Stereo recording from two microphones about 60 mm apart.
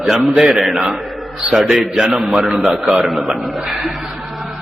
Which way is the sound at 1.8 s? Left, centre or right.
Right.